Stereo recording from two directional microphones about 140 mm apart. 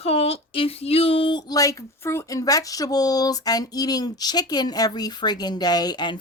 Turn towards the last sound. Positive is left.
turn(degrees=30)  # may be behind; listen again after turning